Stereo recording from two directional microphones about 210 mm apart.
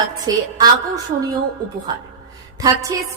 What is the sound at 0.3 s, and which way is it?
Speech, 15° right (ahead or behind).